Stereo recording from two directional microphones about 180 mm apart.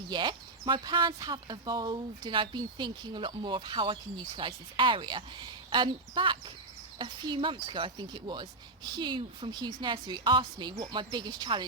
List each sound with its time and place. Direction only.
0.1 s speech: 25° right (ahead or behind)